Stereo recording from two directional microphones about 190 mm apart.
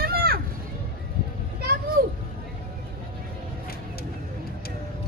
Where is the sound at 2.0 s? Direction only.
50° right (ahead or behind).